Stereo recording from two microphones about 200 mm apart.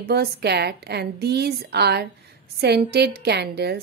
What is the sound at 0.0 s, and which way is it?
A woman's voice, 50° right (ahead or behind).